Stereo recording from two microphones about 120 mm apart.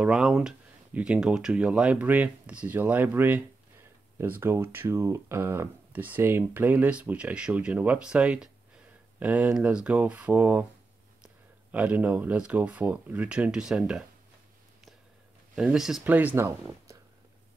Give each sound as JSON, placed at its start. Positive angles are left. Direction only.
{"t": 0.0, "sound": "speech", "side_deg": -5}
{"t": 11.7, "sound": "speech", "side_deg": -15}
{"t": 15.5, "sound": "speech", "side_deg": -5}